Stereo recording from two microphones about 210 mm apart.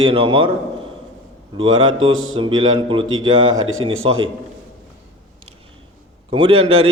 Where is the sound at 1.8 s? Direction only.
70° right (ahead or behind).